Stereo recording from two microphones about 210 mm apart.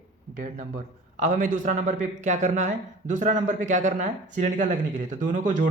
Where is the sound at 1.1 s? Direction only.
40° right (ahead or behind).